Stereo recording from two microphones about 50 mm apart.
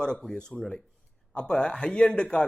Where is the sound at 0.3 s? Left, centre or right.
Centre.